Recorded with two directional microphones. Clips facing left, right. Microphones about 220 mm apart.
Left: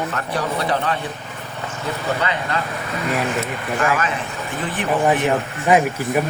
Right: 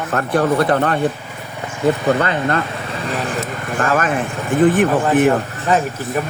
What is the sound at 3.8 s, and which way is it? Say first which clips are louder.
Speech: right 4 dB; 50° right (ahead or behind).